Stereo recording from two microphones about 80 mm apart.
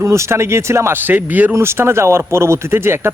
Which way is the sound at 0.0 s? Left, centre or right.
Right.